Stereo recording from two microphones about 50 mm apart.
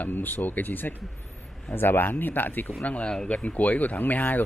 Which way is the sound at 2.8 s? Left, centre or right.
Left.